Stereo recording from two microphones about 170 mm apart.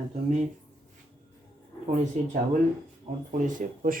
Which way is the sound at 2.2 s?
45° right (ahead or behind).